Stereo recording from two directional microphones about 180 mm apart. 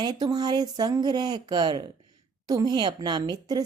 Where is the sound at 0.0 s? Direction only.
25° right (ahead or behind).